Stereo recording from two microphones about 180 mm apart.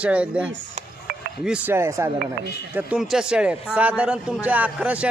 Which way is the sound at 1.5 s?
10° right (ahead or behind).